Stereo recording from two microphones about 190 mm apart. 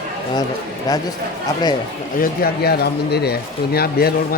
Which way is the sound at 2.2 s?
55° left (ahead or behind).